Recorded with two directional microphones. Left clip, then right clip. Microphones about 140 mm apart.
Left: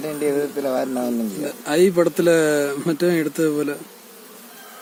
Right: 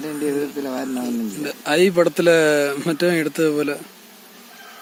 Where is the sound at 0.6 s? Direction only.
90° left.